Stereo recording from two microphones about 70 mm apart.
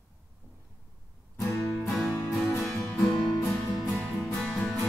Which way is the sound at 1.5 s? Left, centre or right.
Centre.